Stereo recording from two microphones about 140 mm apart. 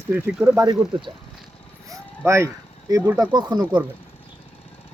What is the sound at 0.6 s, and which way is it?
Speech, 30° right (ahead or behind).